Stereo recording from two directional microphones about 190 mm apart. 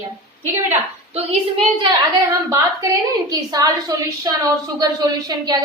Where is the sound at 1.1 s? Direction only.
35° right (ahead or behind).